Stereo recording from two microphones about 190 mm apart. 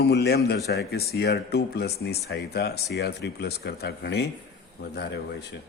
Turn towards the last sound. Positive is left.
turn(degrees=60)  # may be behind; listen again after turning